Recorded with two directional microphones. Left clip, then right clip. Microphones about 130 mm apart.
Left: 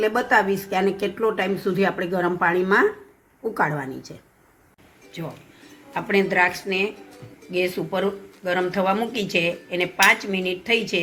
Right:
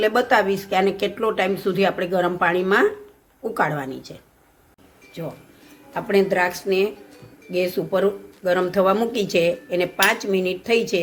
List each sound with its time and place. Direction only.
0.0 s speech: 15° right (ahead or behind)
5.9 s a woman's voice: 40° right (ahead or behind); by 11.0 s 55° right (ahead or behind)